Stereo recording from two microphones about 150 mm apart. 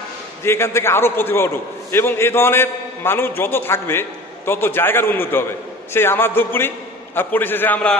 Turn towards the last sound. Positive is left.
turn(degrees=10)  # may be behind; listen again after turning